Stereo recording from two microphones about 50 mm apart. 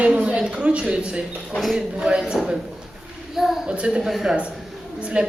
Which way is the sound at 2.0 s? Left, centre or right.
Centre.